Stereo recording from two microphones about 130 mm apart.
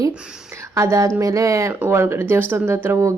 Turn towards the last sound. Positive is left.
turn(degrees=-20)  # may be behind; listen again after turning